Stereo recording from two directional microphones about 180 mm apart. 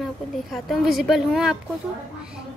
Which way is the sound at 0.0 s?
Centre (ahead or behind).